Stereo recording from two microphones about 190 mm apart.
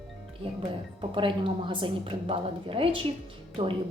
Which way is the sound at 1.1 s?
25° right (ahead or behind).